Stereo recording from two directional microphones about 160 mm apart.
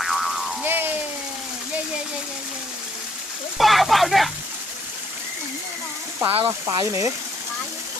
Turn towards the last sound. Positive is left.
turn(degrees=-20)  # may be behind; listen again after turning